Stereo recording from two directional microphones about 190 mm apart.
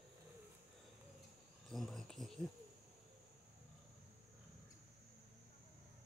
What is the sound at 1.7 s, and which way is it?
Cricket, centre (ahead or behind).